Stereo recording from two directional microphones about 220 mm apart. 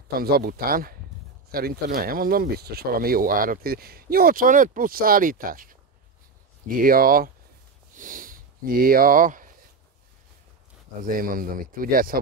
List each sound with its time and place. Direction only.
0.1 s speech: 45° right (ahead or behind)
7.9 s sniff: 40° right (ahead or behind)
11.0 s speech: 40° right (ahead or behind)